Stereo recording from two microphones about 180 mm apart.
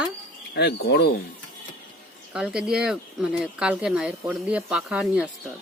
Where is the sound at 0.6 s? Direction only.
65° left (ahead or behind).